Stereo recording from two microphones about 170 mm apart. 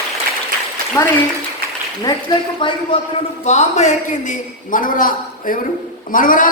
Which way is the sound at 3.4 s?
40° left (ahead or behind).